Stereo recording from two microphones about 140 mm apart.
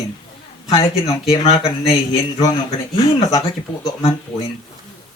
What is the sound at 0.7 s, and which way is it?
Speech, 25° left (ahead or behind).